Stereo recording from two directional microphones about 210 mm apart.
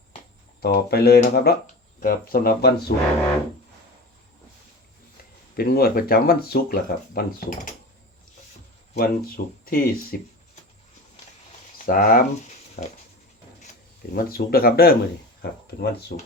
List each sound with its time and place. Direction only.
0.6 s speech: 50° left (ahead or behind)
5.5 s speech: 45° left (ahead or behind)
9.0 s speech: 45° left (ahead or behind)
11.8 s speech: 40° left (ahead or behind)
14.1 s speech: 45° left (ahead or behind)